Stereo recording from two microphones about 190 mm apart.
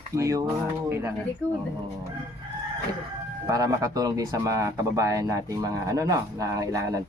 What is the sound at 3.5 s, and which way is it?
Speech, 20° right (ahead or behind).